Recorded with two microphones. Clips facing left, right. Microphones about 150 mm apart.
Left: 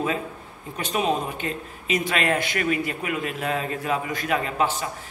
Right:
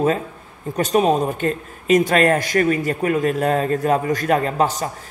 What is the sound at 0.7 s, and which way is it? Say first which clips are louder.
A man's voice: right 8 dB; 40° right (ahead or behind).